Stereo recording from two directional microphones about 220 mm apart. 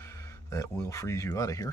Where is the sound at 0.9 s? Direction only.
15° left (ahead or behind).